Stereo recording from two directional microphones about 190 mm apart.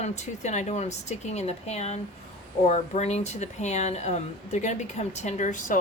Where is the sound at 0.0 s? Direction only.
40° left (ahead or behind).